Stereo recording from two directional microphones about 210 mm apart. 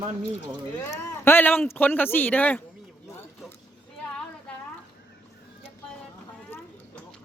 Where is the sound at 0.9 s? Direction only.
10° left (ahead or behind).